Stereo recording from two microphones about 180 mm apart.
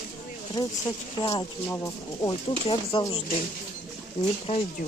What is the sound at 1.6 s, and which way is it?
Speech, 15° left (ahead or behind).